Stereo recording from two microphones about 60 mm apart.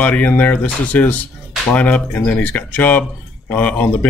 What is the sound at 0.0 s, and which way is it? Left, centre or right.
Speech, left.